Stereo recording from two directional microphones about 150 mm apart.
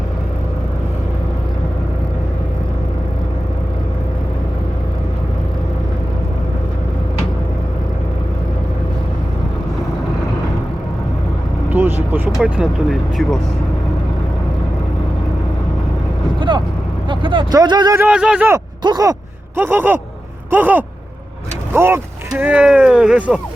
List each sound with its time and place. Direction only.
11.7 s vehicle: 15° right (ahead or behind)
12.4 s speech: centre (ahead or behind)
16.4 s speech: 30° right (ahead or behind)
17.9 s speech: 10° right (ahead or behind)
18.8 s speech: 25° right (ahead or behind)
19.5 s speech: 15° right (ahead or behind)